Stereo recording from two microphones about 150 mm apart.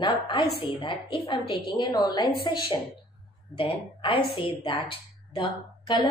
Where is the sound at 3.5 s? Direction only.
35° left (ahead or behind).